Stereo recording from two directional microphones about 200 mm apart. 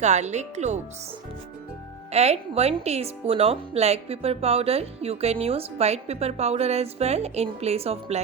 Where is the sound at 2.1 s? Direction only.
30° right (ahead or behind).